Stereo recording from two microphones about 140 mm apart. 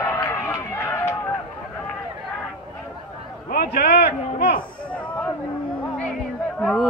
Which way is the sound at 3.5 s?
90° left.